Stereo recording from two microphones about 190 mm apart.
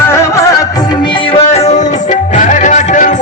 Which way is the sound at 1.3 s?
35° left (ahead or behind).